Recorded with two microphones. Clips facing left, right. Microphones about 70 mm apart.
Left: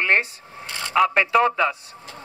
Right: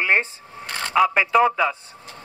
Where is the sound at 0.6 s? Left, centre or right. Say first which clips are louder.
Right 3 dB; right.